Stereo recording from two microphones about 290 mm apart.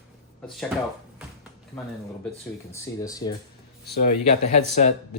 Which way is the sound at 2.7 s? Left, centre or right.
Centre.